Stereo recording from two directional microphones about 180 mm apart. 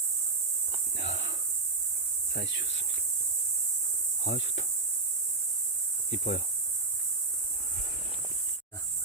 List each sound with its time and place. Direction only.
0.9 s a sound: 85° left
2.3 s speech: 75° left (ahead or behind)
4.2 s speech: 80° left
6.1 s cricket: 65° left (ahead or behind)